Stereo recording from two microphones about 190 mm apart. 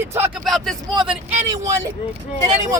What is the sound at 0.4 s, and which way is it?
Speech, centre (ahead or behind).